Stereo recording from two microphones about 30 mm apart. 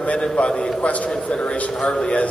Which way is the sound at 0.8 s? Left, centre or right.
Left.